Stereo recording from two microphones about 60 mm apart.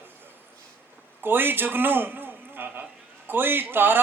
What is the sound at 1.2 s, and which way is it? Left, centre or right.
A man's voice, right.